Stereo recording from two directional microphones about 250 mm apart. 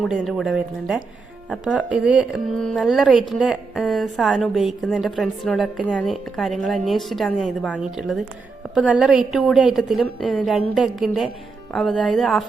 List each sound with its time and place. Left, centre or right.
0.0 s speech: centre